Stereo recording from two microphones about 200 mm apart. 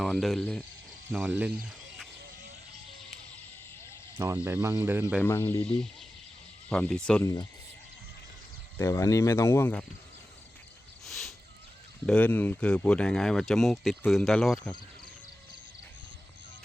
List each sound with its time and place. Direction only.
0.0 s speech: centre (ahead or behind)
4.4 s speech: 15° right (ahead or behind)
5.2 s speech: 10° left (ahead or behind)
5.5 s speech: 25° left (ahead or behind)
6.7 s speech: 5° left (ahead or behind)
8.8 s speech: 15° left (ahead or behind)
11.0 s a sound: centre (ahead or behind)
12.0 s speech: 5° left (ahead or behind)